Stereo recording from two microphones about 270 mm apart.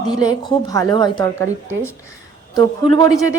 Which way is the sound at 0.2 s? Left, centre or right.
Centre.